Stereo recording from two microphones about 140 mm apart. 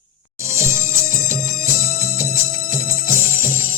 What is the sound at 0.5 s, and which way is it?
Music, 20° right (ahead or behind).